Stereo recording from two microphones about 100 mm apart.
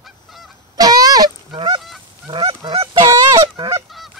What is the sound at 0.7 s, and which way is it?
Goose, 40° right (ahead or behind).